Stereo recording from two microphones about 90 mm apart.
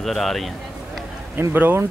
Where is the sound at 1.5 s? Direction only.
20° right (ahead or behind).